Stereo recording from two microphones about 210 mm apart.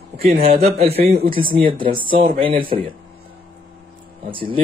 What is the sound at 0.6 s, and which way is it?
Speech, 30° right (ahead or behind).